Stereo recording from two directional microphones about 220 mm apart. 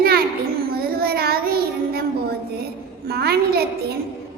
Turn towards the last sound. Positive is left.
turn(degrees=-45)  # may be behind; listen again after turning